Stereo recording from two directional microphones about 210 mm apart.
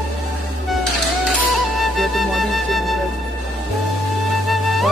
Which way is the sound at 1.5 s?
Centre (ahead or behind).